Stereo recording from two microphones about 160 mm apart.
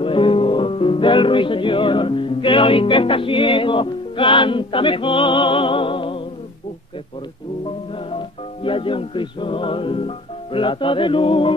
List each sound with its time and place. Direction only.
0.0 s music: 35° left (ahead or behind)
8.6 s music: 35° left (ahead or behind)